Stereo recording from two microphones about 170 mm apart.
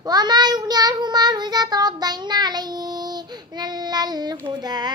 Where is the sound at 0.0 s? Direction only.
25° right (ahead or behind).